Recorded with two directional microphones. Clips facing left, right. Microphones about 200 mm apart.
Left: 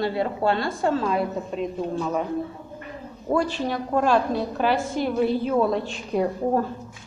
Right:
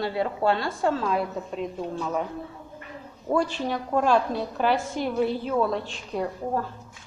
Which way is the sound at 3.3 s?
5° left (ahead or behind).